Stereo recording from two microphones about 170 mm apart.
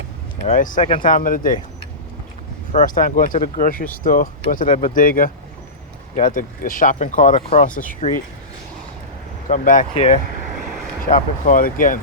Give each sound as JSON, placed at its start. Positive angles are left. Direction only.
{"t": 0.4, "sound": "speech", "side_deg": 50}
{"t": 0.8, "sound": "speech", "side_deg": 35}
{"t": 1.0, "sound": "speech", "side_deg": 55}
{"t": 2.7, "sound": "speech", "side_deg": 50}
{"t": 9.5, "sound": "speech", "side_deg": 50}
{"t": 9.9, "sound": "speech", "side_deg": 40}